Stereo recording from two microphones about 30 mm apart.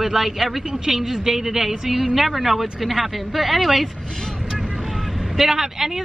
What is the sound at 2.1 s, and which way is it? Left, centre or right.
Speech, centre.